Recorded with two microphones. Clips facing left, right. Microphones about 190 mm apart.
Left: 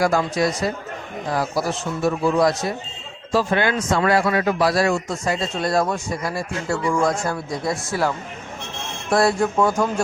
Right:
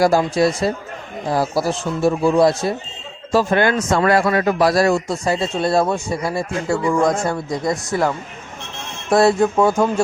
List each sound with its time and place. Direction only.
0.0 s speech: 30° right (ahead or behind)
3.3 s speech: 45° right (ahead or behind); by 9.9 s 25° right (ahead or behind)